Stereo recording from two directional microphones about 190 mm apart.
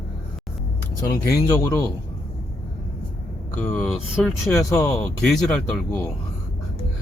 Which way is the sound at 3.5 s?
10° left (ahead or behind).